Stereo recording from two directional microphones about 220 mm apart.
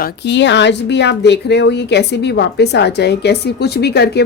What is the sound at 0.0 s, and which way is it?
A woman's voice, 55° left (ahead or behind).